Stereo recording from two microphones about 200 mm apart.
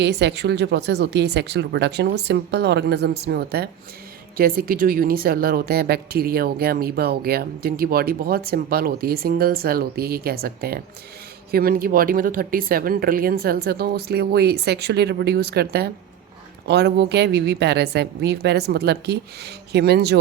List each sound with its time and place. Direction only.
0.0 s a woman's voice: 60° right (ahead or behind)